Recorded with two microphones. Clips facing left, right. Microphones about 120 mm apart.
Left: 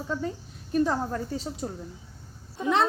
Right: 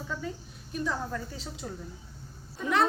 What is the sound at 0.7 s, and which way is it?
A woman's voice, 40° left (ahead or behind).